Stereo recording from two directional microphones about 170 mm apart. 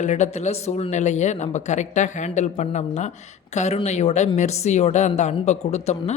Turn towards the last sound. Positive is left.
turn(degrees=40)  # may be behind; listen again after turning